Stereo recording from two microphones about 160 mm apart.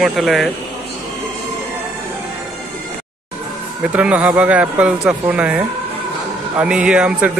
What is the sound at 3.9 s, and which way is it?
Speech, 10° right (ahead or behind).